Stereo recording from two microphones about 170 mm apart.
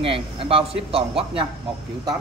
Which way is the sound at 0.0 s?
30° right (ahead or behind).